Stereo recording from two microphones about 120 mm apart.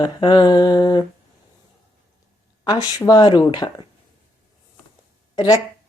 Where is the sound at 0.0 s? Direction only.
35° left (ahead or behind).